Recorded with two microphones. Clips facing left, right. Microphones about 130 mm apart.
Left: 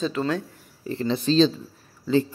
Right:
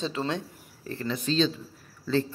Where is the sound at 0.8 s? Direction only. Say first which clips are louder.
Left 6 dB; 25° left (ahead or behind).